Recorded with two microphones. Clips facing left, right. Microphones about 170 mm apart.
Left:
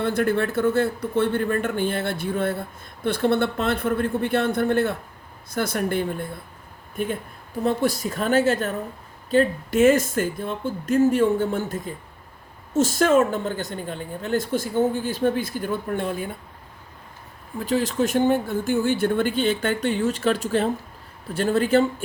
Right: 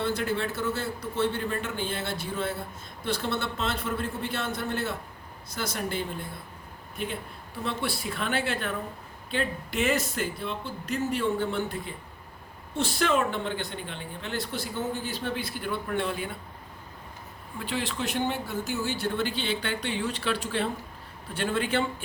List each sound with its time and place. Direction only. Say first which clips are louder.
0.0 s speech: left 7 dB; 55° left (ahead or behind)
17.6 s speech: left 9 dB; 40° left (ahead or behind)